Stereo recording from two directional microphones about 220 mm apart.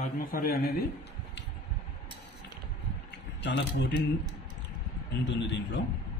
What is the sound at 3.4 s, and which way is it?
Speech, 50° left (ahead or behind).